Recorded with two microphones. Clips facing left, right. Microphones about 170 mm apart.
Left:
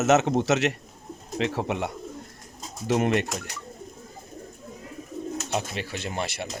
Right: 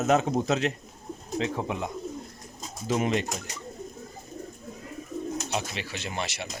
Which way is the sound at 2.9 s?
65° left (ahead or behind).